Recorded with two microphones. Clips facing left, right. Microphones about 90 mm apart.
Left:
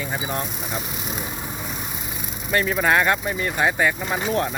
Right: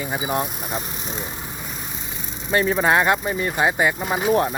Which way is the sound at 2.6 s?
30° right (ahead or behind).